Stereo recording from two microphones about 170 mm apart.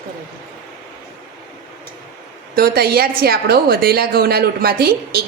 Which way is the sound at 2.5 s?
65° right (ahead or behind).